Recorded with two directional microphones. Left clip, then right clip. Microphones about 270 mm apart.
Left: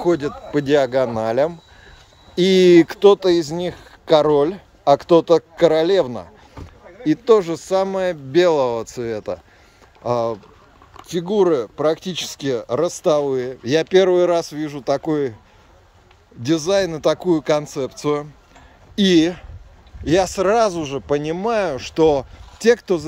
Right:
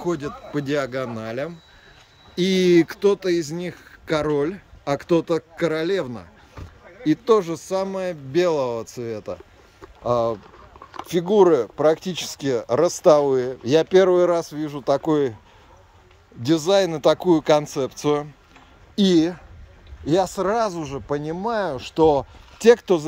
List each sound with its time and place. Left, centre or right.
0.0 s speech: centre
16.4 s speech: centre
19.1 s speech: centre
20.1 s speech: centre